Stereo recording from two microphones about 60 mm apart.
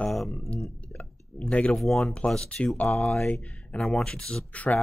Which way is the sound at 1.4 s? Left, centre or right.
Centre.